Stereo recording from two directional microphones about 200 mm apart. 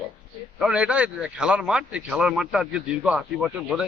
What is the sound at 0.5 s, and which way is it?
A man's voice, 5° right (ahead or behind).